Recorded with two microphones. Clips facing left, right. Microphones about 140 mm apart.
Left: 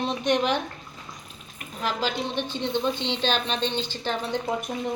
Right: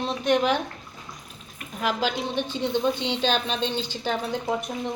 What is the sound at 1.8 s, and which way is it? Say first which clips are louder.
A woman's voice: right 2 dB; 10° right (ahead or behind).